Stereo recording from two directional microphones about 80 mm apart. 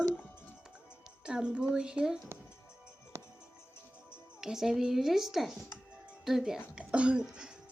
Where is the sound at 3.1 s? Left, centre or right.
Right.